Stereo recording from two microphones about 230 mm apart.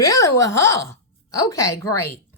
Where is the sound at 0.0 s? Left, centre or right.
Centre.